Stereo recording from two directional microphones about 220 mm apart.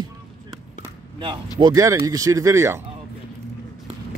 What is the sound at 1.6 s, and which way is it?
Speech, 15° right (ahead or behind).